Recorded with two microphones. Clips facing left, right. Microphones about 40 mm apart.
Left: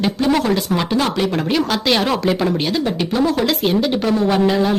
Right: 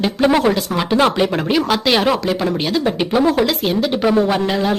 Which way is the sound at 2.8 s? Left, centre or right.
Centre.